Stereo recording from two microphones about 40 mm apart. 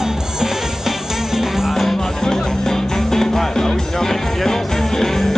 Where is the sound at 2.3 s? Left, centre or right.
Centre.